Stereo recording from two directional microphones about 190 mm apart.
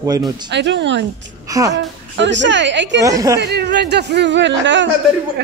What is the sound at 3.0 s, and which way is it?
Speech, 15° right (ahead or behind).